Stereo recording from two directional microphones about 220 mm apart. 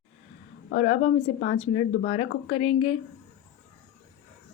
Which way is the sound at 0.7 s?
30° left (ahead or behind).